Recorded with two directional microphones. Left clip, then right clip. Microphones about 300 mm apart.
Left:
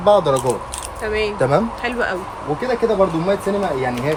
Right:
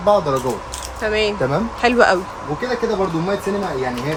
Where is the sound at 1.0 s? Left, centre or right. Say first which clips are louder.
Even; centre.